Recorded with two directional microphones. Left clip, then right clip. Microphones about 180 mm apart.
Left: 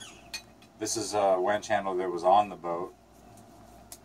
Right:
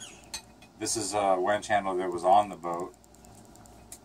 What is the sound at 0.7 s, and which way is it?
Speech, 10° right (ahead or behind).